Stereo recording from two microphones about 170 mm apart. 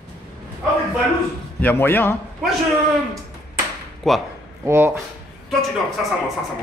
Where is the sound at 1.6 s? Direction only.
10° left (ahead or behind).